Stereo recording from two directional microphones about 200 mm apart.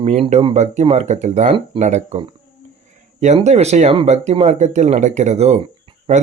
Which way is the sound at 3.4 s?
35° right (ahead or behind).